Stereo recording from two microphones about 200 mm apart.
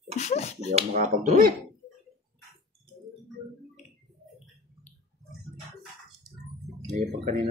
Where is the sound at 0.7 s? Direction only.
40° right (ahead or behind).